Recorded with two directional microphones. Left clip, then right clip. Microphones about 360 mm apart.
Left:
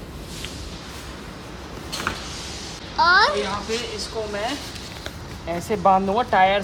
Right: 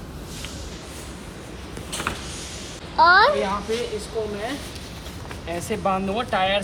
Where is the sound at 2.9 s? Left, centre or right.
Centre.